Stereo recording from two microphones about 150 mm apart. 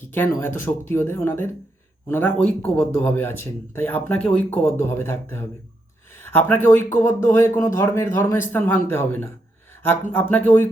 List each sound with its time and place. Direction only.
0.0 s speech: 15° left (ahead or behind)